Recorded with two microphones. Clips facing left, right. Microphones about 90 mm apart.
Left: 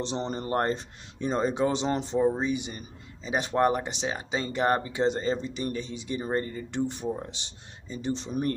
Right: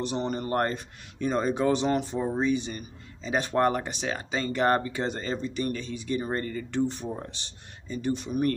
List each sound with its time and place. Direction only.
0.0 s speech: 25° left (ahead or behind)